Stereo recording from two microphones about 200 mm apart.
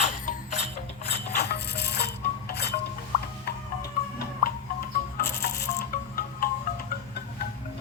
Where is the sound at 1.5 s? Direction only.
55° left (ahead or behind).